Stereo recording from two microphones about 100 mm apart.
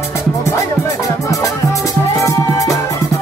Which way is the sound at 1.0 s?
35° left (ahead or behind).